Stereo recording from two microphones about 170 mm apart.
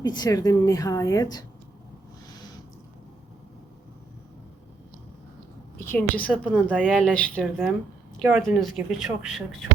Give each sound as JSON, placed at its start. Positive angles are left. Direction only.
{"t": 0.0, "sound": "a woman's voice", "side_deg": 25}
{"t": 5.8, "sound": "a woman's voice", "side_deg": 10}
{"t": 6.5, "sound": "speech", "side_deg": -10}
{"t": 6.8, "sound": "speech", "side_deg": 5}
{"t": 7.4, "sound": "speech", "side_deg": -5}